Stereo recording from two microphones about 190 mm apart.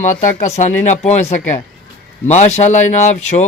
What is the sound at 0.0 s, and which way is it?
Speech, 40° left (ahead or behind).